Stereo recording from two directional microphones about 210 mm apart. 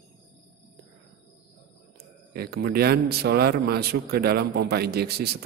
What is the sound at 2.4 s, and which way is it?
A man's voice, 50° right (ahead or behind).